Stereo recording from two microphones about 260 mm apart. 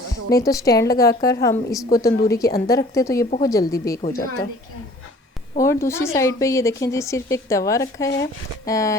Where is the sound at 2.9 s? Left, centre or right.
Centre.